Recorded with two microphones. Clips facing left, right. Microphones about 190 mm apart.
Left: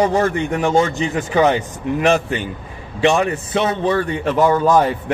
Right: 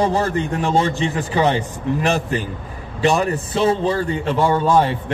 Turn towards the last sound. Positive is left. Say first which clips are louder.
# left 2 dB
turn(degrees=-30)  # may be behind; listen again after turning